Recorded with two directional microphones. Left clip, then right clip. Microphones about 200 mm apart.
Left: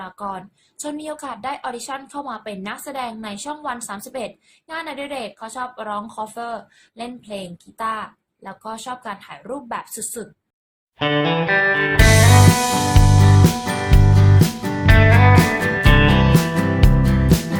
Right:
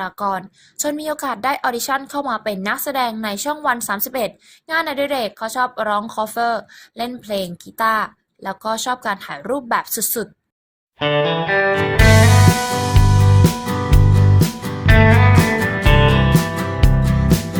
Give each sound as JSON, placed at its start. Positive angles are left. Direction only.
{"t": 0.0, "sound": "a woman's voice", "side_deg": -50}
{"t": 11.0, "sound": "music", "side_deg": 0}